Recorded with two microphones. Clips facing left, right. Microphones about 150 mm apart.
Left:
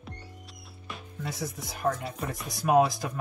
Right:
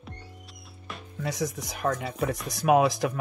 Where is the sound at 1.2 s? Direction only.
90° right.